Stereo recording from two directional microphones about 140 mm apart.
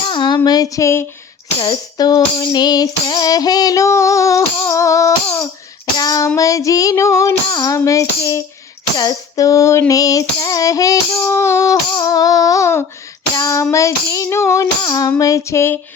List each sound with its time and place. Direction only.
0.1 s child singing: 35° left (ahead or behind)
0.4 s female singing: 25° left (ahead or behind)
13.3 s child singing: 20° left (ahead or behind)
15.2 s female singing: 20° left (ahead or behind)